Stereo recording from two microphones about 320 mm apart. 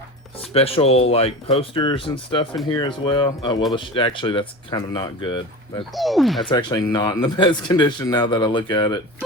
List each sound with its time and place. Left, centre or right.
0.5 s speech: centre
5.8 s speech: centre
6.4 s speech: centre